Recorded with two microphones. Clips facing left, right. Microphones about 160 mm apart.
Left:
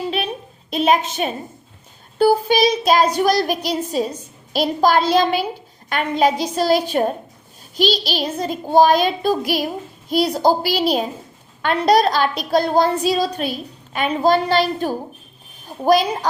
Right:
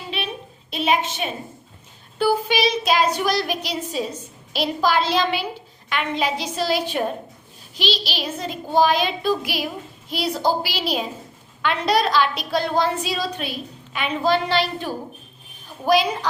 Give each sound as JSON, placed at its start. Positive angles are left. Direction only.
{"t": 0.7, "sound": "a woman's voice", "side_deg": 40}
{"t": 3.2, "sound": "child singing", "side_deg": 40}
{"t": 11.6, "sound": "a woman's voice", "side_deg": 40}